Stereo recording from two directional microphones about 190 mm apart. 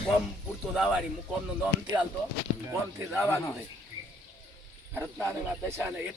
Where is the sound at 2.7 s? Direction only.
15° right (ahead or behind).